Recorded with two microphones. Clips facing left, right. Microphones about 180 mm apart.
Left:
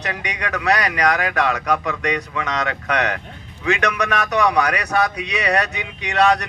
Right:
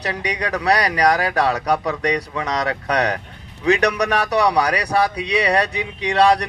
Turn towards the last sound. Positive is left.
turn(degrees=-30)  # may be behind; listen again after turning